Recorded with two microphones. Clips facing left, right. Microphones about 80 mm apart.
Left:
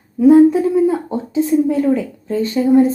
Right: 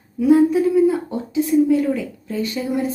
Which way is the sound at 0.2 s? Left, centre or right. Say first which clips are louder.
Left 5 dB; left.